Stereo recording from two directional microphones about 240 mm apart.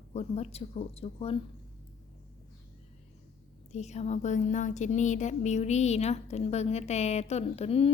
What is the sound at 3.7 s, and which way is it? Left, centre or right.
A woman's voice, left.